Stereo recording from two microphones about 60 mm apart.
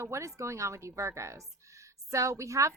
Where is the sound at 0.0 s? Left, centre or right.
Right.